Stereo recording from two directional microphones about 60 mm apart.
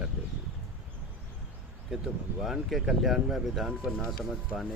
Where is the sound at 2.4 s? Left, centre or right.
Centre.